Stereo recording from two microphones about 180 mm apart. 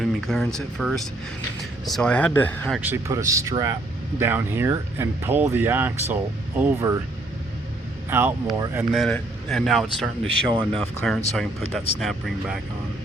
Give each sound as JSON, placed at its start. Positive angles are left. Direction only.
{"t": 0.0, "sound": "speech", "side_deg": 0}
{"t": 2.7, "sound": "speech", "side_deg": -10}
{"t": 8.1, "sound": "speech", "side_deg": -10}
{"t": 8.9, "sound": "speech", "side_deg": 0}
{"t": 10.5, "sound": "speech", "side_deg": -25}
{"t": 10.8, "sound": "speech", "side_deg": 0}